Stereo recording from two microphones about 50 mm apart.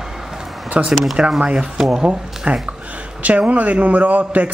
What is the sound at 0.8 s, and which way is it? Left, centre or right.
A woman's voice, right.